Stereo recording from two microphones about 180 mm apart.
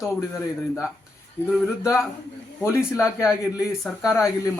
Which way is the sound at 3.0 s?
5° right (ahead or behind).